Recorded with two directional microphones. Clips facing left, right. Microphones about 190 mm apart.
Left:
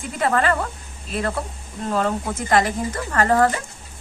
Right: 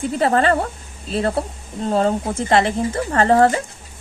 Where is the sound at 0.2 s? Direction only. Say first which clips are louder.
Right 3 dB; 30° right (ahead or behind).